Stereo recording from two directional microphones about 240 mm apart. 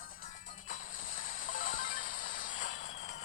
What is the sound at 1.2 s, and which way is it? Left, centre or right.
Music, left.